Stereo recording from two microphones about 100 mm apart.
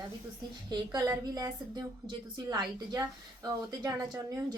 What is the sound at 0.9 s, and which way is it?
A woman's voice, 35° right (ahead or behind).